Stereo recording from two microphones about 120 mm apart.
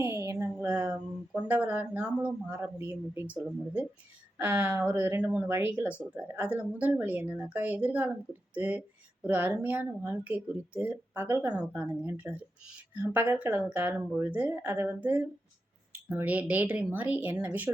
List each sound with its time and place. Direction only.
0.0 s a sound: 20° right (ahead or behind)
1.4 s speech: 15° right (ahead or behind)
5.2 s speech: 10° right (ahead or behind)
5.5 s speech: 20° right (ahead or behind)